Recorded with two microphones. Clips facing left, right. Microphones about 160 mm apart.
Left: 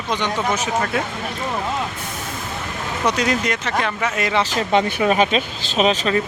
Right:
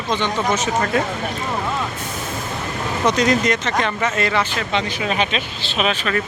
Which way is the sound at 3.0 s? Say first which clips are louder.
Right 3 dB; 10° left (ahead or behind).